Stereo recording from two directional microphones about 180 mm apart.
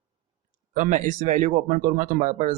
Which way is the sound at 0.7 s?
45° right (ahead or behind).